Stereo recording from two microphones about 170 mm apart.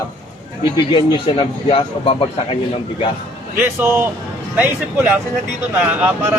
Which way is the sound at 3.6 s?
10° right (ahead or behind).